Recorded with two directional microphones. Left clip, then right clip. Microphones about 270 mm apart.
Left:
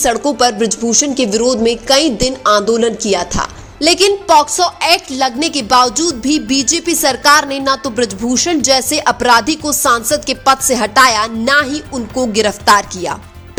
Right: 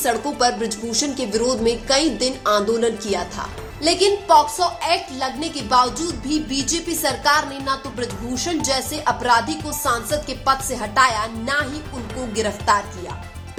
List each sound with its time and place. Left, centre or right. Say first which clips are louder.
0.0 s speech: left 7 dB; left